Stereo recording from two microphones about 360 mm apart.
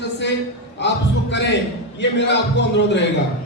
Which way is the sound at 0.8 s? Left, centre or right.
Left.